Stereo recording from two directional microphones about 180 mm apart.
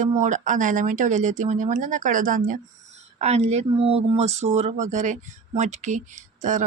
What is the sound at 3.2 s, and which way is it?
Speech, 35° right (ahead or behind).